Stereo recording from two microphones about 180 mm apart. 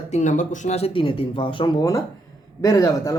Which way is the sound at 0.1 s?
40° left (ahead or behind).